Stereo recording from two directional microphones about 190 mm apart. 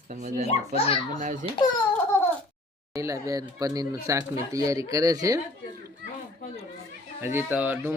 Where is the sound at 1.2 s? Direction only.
40° right (ahead or behind).